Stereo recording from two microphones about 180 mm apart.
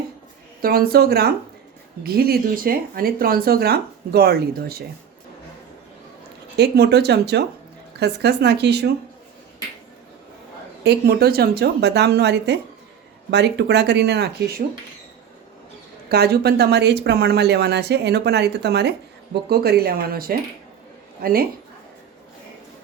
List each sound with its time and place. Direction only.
0.6 s speech: 55° right (ahead or behind)
6.6 s speech: 65° right (ahead or behind)
10.8 s speech: 60° right (ahead or behind)
16.0 s speech: 60° right (ahead or behind)